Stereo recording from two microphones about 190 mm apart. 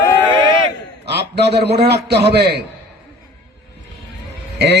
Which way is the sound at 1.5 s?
60° right (ahead or behind).